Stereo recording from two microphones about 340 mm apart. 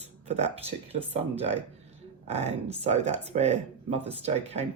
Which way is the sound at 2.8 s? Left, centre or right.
Centre.